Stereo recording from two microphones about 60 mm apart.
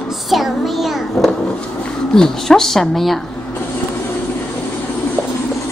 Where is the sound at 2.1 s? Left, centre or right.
Centre.